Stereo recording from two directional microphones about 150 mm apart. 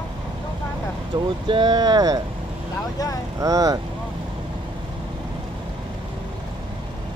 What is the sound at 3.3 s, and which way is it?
Speech, 25° right (ahead or behind).